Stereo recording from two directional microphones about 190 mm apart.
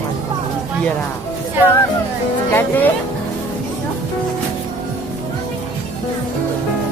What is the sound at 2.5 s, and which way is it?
Music, 10° left (ahead or behind).